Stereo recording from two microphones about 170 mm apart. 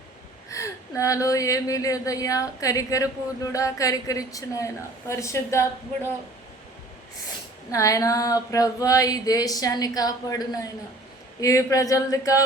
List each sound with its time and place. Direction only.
0.5 s speech: 20° left (ahead or behind)
7.7 s speech: 20° left (ahead or behind)